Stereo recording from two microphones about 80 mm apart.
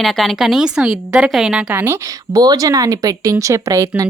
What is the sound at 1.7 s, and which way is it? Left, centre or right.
Speech, right.